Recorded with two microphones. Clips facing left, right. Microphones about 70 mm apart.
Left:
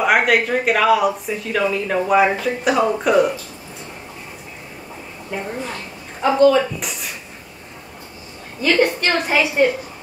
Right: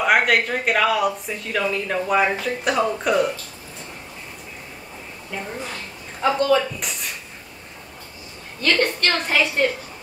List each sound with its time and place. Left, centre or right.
0.0 s speech: centre
5.3 s a woman's voice: centre
6.2 s speech: centre
8.5 s a woman's voice: centre